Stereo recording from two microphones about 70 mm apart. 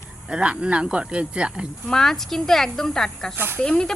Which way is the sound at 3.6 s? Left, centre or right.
Centre.